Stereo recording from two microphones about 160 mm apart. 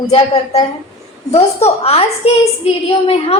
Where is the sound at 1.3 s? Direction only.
40° left (ahead or behind).